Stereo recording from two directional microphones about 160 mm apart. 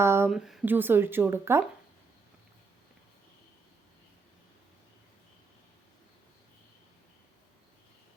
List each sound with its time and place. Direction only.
0.0 s a sound: 15° right (ahead or behind)
0.3 s speech: centre (ahead or behind)
0.7 s a woman's voice: 15° right (ahead or behind)